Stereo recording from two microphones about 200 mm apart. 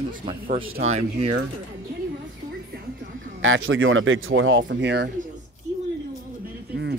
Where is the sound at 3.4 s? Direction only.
80° right; by 5.1 s 60° right (ahead or behind).